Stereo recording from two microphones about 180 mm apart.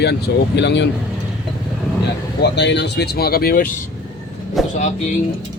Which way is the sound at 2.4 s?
70° left (ahead or behind).